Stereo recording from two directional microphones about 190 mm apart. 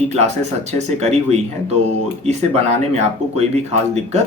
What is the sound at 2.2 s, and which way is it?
Speech, 35° right (ahead or behind).